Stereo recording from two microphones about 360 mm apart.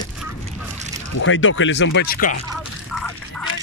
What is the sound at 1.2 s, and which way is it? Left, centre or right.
Speech, left.